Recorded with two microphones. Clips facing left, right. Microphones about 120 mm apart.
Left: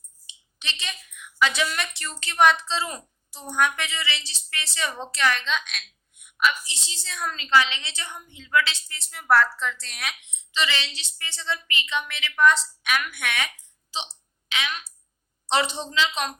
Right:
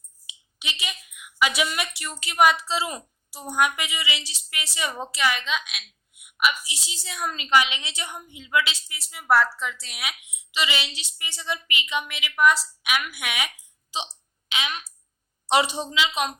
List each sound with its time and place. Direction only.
0.3 s a woman's voice: 10° right (ahead or behind)